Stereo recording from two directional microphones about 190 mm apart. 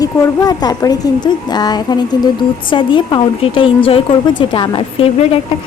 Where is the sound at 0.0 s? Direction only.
20° left (ahead or behind).